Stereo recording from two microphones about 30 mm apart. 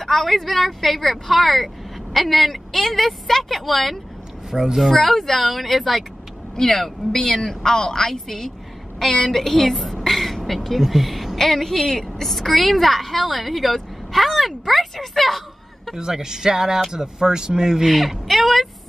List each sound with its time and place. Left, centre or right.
0.0 s a woman's voice: centre
4.5 s a child's voice: centre
4.7 s a woman's voice: centre
15.9 s speech: centre
17.9 s speech: centre